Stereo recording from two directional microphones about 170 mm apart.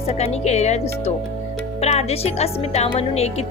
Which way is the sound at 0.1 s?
40° left (ahead or behind).